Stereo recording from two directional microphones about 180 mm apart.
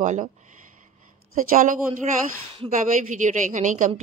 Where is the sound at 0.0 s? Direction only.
40° right (ahead or behind).